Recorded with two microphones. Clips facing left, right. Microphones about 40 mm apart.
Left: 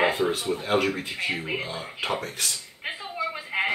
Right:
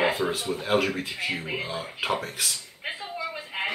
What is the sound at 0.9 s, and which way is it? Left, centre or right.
Speech, centre.